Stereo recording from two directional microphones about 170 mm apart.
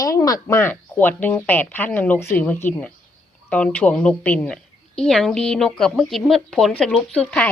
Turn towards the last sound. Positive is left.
turn(degrees=10)  # may be behind; listen again after turning